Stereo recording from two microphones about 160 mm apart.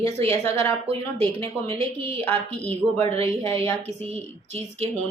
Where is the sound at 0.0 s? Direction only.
40° right (ahead or behind).